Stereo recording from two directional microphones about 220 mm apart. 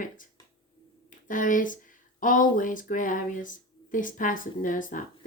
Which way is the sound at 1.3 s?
35° left (ahead or behind).